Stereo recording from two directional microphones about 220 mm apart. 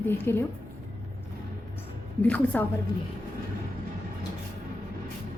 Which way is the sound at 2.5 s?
10° left (ahead or behind).